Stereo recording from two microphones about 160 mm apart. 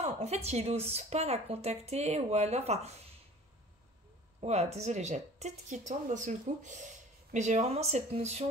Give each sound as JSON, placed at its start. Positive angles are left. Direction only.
{"t": 0.0, "sound": "speech", "side_deg": -40}
{"t": 4.4, "sound": "speech", "side_deg": -40}